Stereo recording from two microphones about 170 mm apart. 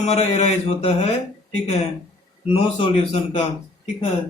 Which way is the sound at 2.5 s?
35° left (ahead or behind).